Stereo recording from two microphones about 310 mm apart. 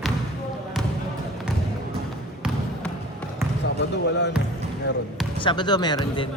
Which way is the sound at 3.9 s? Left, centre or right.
Left.